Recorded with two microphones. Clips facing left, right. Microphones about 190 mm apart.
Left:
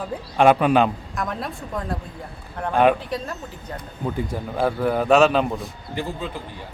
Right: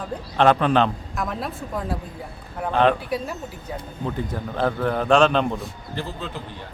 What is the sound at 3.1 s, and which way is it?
Speech, 10° right (ahead or behind).